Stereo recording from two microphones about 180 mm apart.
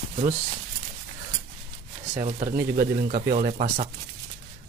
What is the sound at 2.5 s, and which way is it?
Speech, 55° right (ahead or behind).